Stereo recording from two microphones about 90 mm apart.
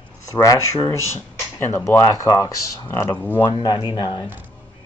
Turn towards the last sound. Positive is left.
turn(degrees=55)  # may be behind; listen again after turning